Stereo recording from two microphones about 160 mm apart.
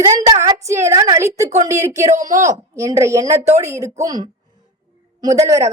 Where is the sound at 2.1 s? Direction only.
50° right (ahead or behind).